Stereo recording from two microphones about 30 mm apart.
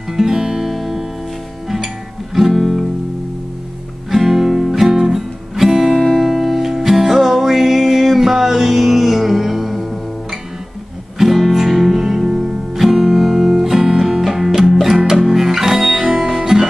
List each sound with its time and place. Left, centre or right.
0.1 s music: centre
2.5 s music: centre
4.1 s music: centre
4.8 s music: centre
6.1 s music: centre
11.1 s music: centre
16.3 s guitar: centre